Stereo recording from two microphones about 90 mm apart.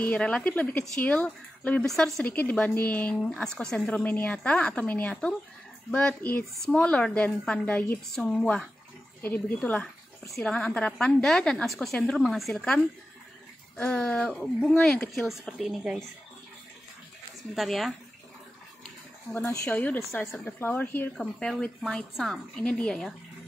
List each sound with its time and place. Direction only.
0.0 s a woman's voice: 10° left (ahead or behind)
1.9 s speech: 5° left (ahead or behind)
2.2 s a woman's voice: 15° left (ahead or behind); by 16.0 s 5° right (ahead or behind)
17.6 s speech: centre (ahead or behind)
19.6 s a woman's voice: 15° left (ahead or behind)
21.2 s a woman's voice: 10° left (ahead or behind)